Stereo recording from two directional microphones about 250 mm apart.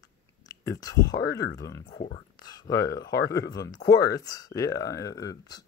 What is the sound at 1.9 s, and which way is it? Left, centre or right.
Speech, left.